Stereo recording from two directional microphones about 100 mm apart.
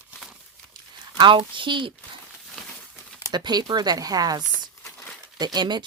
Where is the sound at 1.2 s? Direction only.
55° right (ahead or behind).